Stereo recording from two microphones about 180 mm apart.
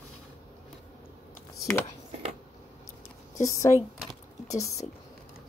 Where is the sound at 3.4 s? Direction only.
15° left (ahead or behind).